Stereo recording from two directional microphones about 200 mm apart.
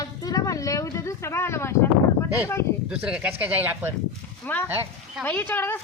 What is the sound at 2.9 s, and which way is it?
Speech, 5° right (ahead or behind).